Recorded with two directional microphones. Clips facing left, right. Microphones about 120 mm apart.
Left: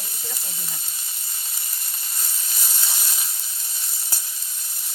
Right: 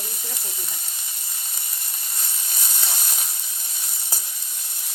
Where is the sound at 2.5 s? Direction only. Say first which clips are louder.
Right 2 dB; 25° right (ahead or behind).